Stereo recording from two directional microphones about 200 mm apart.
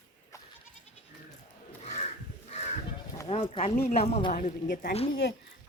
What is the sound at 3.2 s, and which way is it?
Speech, 30° left (ahead or behind).